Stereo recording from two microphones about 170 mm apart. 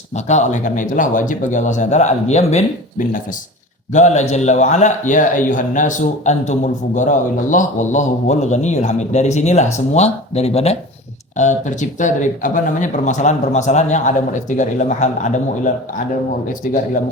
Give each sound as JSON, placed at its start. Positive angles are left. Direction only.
{"t": 0.3, "sound": "a man's voice", "side_deg": 45}
{"t": 3.9, "sound": "a man's voice", "side_deg": 45}